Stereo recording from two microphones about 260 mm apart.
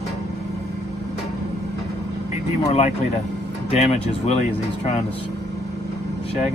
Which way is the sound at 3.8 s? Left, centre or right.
Left.